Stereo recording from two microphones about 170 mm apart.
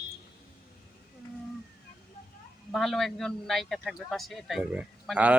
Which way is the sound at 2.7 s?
Centre (ahead or behind).